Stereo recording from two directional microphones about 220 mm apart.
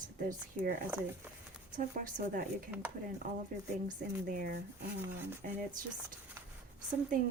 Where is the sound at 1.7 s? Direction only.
40° right (ahead or behind).